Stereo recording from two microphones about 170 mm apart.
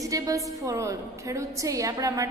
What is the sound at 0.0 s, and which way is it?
A woman's voice, 20° right (ahead or behind).